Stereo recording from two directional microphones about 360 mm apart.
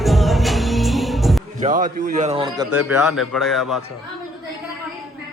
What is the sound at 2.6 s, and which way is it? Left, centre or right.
A man's voice, centre.